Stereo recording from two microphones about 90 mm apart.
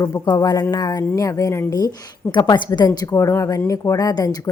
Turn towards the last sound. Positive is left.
turn(degrees=45)  # may be behind; listen again after turning